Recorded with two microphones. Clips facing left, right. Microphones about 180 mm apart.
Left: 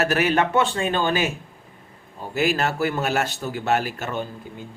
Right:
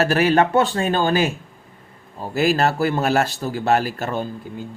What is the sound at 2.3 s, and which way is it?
A man's voice, 35° right (ahead or behind).